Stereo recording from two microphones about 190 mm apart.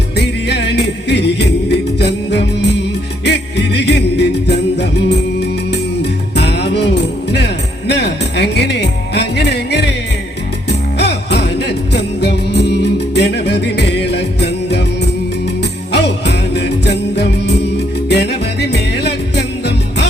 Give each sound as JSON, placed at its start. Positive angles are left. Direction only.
{"t": 0.2, "sound": "music", "side_deg": 65}
{"t": 15.9, "sound": "jingle bell", "side_deg": 65}
{"t": 18.1, "sound": "music", "side_deg": 60}